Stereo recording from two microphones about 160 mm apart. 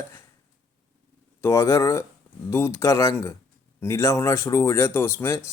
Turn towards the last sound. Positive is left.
turn(degrees=15)  # may be behind; listen again after turning